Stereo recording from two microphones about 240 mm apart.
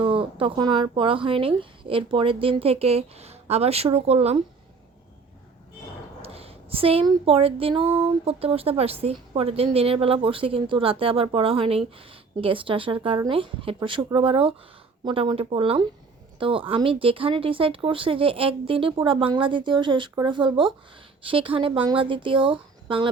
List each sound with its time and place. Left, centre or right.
0.0 s speech: right
6.2 s speech: right